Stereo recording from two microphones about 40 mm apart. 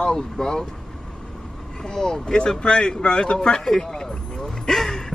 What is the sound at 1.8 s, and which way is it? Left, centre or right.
Speech, centre.